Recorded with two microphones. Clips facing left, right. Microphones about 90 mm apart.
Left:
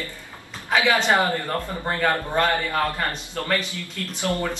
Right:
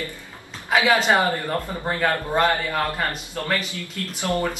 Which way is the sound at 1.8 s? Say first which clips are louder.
Even; 5° right (ahead or behind).